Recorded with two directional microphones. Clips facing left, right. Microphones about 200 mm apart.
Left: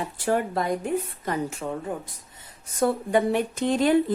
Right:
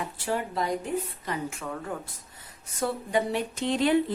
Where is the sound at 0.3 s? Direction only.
55° left (ahead or behind).